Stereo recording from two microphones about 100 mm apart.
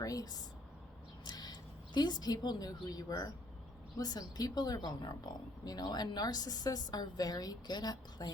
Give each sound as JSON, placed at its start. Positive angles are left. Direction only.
{"t": 0.0, "sound": "a woman's voice", "side_deg": 35}